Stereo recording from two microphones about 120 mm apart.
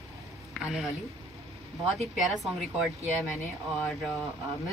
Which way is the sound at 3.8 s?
5° left (ahead or behind).